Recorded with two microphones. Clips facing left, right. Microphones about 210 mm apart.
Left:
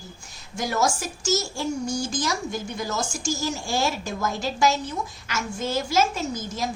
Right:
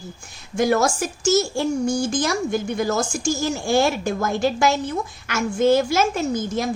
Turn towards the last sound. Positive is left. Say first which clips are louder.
# right 6 dB
turn(degrees=-55)  # may be behind; listen again after turning